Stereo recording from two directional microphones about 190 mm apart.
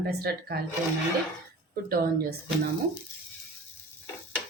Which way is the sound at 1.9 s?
50° right (ahead or behind).